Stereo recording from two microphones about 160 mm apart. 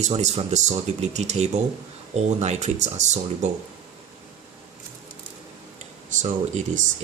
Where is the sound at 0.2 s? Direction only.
45° right (ahead or behind).